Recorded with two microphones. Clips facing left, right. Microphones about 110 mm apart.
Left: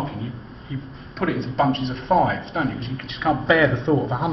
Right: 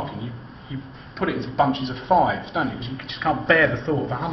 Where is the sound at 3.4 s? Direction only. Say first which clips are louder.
Left 1 dB; 20° left (ahead or behind).